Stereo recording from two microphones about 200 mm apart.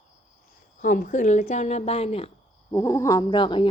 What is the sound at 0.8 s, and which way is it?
Speech, 40° left (ahead or behind).